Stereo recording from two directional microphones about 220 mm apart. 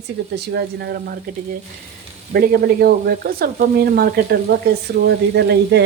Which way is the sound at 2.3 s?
45° right (ahead or behind).